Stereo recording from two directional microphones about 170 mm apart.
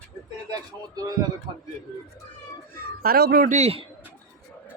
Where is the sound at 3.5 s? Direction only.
40° right (ahead or behind).